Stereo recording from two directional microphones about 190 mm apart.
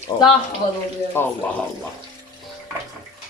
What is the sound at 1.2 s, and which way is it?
Speech, 10° left (ahead or behind).